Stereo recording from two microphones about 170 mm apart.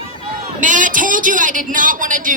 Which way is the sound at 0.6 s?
50° right (ahead or behind).